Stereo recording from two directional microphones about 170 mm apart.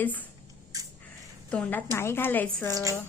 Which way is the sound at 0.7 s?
20° right (ahead or behind).